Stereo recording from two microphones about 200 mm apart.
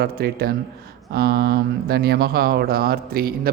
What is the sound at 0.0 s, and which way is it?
Speech, 50° right (ahead or behind).